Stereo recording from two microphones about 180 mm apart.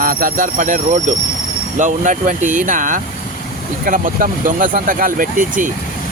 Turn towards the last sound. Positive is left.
turn(degrees=-45)  # may be behind; listen again after turning